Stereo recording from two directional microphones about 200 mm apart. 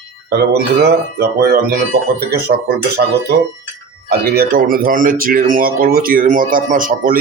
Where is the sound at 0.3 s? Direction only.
55° right (ahead or behind).